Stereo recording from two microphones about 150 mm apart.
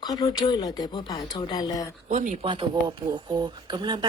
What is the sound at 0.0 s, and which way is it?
A man's voice, 25° left (ahead or behind).